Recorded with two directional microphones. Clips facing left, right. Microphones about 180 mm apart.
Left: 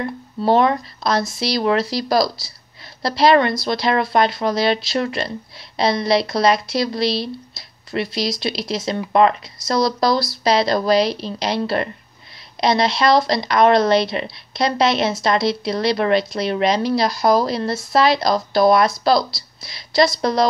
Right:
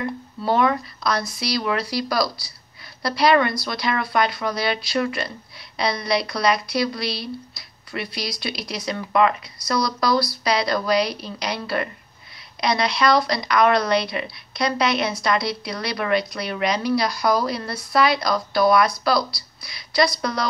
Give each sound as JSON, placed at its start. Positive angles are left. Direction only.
{"t": 0.5, "sound": "a woman's voice", "side_deg": 30}